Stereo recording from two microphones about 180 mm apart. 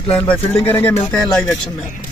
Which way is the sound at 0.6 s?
10° left (ahead or behind).